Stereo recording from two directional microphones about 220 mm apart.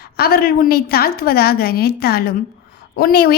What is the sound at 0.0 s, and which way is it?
A woman's voice, 45° left (ahead or behind).